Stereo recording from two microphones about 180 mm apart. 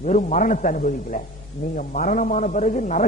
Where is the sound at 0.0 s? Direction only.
40° left (ahead or behind).